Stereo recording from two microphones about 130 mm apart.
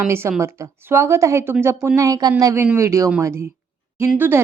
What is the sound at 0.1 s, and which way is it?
A woman's voice, 20° right (ahead or behind).